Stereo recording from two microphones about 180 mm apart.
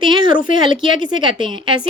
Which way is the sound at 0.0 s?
25° right (ahead or behind).